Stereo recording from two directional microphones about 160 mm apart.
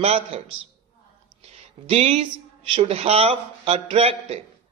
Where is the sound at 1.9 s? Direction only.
40° right (ahead or behind).